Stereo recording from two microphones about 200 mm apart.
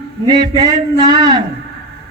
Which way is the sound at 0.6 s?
20° right (ahead or behind).